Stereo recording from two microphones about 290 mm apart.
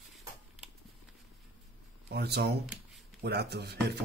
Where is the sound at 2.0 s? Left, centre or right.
Right.